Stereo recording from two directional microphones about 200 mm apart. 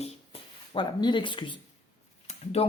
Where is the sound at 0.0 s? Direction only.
25° left (ahead or behind).